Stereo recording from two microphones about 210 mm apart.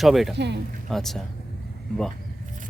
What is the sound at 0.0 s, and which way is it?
Speech, centre (ahead or behind).